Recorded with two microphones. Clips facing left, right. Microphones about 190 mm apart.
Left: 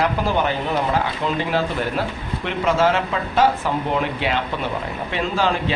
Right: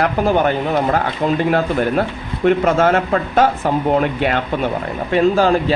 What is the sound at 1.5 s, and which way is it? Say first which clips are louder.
Speech: right 6 dB; 50° right (ahead or behind).